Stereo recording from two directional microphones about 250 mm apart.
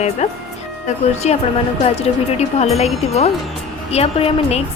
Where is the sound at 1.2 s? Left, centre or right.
Left.